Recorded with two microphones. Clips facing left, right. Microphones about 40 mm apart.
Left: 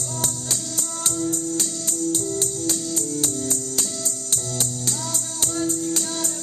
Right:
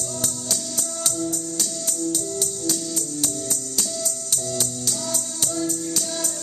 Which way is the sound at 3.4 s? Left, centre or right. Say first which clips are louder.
Left 2 dB; left.